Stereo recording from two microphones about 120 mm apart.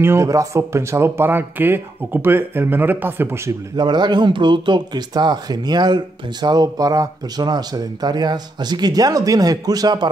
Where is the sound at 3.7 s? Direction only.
35° right (ahead or behind).